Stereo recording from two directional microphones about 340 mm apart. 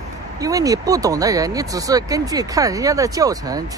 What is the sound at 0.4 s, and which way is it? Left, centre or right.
Speech, centre.